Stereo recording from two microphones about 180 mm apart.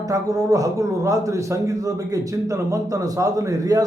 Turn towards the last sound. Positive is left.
turn(degrees=-20)  # may be behind; listen again after turning